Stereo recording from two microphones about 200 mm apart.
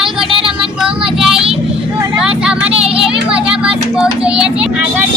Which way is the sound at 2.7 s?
30° right (ahead or behind).